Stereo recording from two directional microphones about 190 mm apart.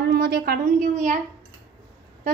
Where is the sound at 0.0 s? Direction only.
55° right (ahead or behind).